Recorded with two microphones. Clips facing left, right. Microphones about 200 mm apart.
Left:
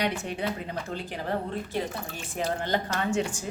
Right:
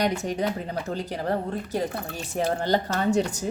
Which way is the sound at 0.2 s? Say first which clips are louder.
Right 4 dB; 40° right (ahead or behind).